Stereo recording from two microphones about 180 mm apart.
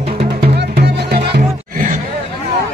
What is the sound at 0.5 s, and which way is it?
Music, 70° right (ahead or behind).